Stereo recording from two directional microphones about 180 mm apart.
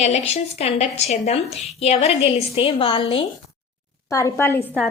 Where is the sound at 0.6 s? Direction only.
35° left (ahead or behind).